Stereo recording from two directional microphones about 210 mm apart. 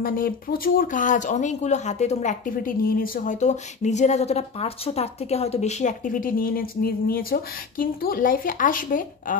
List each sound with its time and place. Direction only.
0.0 s speech: 45° left (ahead or behind)